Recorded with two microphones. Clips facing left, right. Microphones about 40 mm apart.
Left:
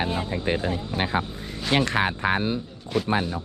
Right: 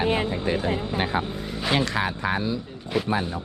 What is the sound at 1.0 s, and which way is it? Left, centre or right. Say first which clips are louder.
Speech: left 2 dB; left.